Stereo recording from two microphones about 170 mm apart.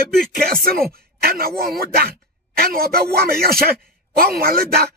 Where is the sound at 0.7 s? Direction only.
60° right (ahead or behind).